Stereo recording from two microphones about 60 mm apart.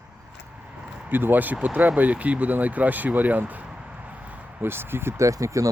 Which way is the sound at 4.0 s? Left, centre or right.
Right.